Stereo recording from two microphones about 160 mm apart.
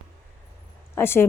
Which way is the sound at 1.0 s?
15° left (ahead or behind).